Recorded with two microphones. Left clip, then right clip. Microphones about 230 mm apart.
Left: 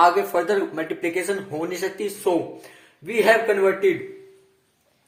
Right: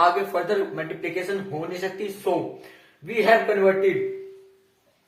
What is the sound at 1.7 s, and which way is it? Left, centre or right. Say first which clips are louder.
Speech: left 2 dB; left.